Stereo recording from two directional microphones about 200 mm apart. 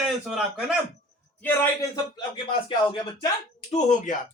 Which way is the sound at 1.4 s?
10° left (ahead or behind).